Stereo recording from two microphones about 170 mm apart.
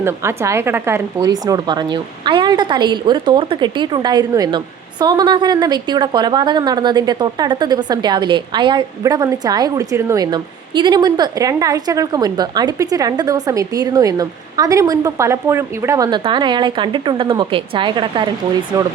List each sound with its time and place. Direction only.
0.0 s speech: 15° right (ahead or behind)